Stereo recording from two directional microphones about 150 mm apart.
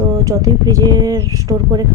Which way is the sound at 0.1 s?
25° right (ahead or behind).